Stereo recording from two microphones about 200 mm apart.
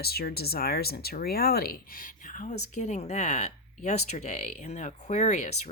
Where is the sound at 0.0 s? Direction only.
50° left (ahead or behind).